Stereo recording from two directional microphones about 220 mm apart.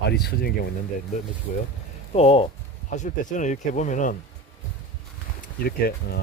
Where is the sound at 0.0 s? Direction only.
45° left (ahead or behind).